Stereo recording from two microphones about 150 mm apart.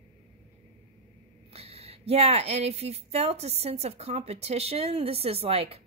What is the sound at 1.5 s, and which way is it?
Speech, 40° right (ahead or behind).